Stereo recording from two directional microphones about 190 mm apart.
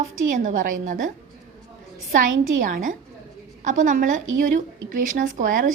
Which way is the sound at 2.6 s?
45° right (ahead or behind).